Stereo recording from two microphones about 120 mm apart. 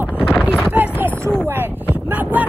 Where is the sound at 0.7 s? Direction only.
15° right (ahead or behind).